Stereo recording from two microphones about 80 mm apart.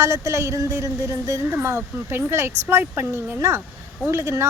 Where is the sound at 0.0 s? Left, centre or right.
Right.